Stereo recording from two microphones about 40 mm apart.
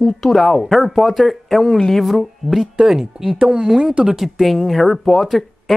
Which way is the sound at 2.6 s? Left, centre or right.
Centre.